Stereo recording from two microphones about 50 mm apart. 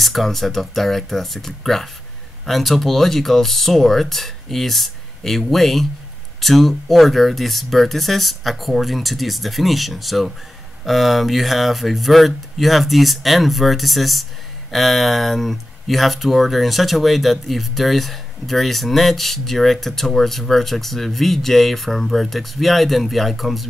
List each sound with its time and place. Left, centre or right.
0.0 s speech: centre